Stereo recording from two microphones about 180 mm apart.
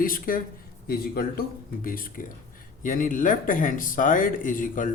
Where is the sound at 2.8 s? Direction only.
50° left (ahead or behind).